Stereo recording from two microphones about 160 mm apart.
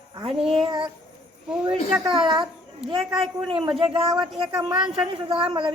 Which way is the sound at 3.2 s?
35° right (ahead or behind).